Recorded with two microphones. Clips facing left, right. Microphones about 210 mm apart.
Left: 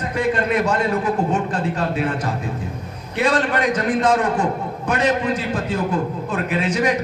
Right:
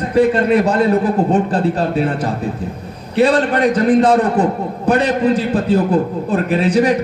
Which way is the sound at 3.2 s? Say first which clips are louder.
Right 6 dB; 35° right (ahead or behind).